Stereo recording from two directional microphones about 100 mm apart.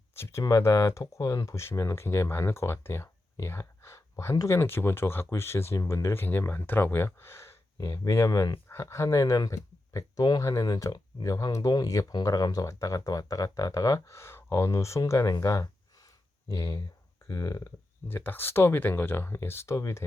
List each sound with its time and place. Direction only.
0.1 s speech: 25° left (ahead or behind)
18.1 s speech: 20° left (ahead or behind)